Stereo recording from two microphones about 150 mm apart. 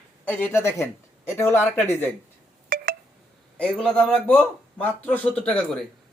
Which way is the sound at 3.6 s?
5° left (ahead or behind).